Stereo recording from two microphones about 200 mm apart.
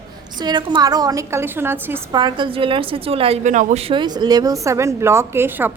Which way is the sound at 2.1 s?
25° right (ahead or behind).